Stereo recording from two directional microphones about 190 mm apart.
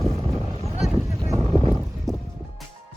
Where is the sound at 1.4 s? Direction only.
25° right (ahead or behind).